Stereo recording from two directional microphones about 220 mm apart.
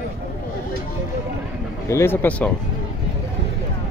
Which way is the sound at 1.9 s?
10° left (ahead or behind).